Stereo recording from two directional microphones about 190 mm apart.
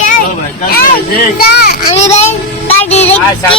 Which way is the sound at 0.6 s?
50° left (ahead or behind).